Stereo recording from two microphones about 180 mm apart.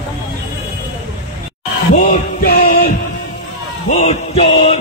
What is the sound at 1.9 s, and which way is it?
Heart murmur, 45° left (ahead or behind).